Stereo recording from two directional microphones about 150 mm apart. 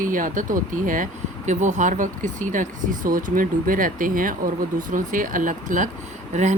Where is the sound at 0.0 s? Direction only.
65° right (ahead or behind).